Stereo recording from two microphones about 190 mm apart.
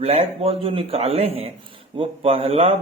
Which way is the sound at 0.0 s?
30° right (ahead or behind).